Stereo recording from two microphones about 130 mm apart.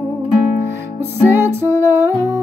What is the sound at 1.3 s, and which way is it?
Music, 20° right (ahead or behind).